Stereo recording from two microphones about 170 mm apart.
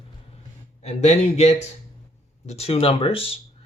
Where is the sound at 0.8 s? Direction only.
40° left (ahead or behind).